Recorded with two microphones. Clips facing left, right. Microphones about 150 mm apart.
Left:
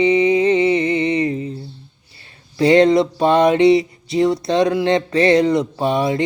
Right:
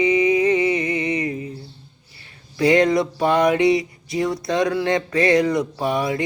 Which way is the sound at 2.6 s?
30° left (ahead or behind).